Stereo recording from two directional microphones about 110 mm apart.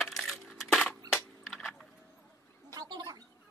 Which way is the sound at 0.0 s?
Centre (ahead or behind).